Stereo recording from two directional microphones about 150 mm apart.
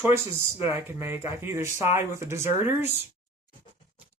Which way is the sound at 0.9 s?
15° right (ahead or behind).